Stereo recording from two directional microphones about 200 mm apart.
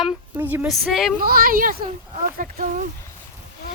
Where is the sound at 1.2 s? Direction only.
45° right (ahead or behind).